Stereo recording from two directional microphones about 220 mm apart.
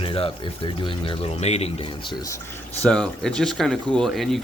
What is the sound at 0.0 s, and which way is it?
Speech, 25° left (ahead or behind).